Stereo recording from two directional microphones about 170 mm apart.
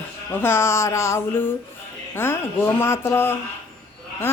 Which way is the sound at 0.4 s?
15° left (ahead or behind).